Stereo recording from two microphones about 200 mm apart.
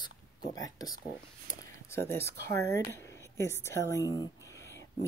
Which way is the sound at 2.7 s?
15° left (ahead or behind).